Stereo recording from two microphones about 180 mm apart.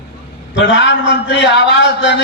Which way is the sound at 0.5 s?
80° left.